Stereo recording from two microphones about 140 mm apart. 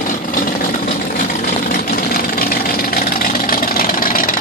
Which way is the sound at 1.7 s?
90° left.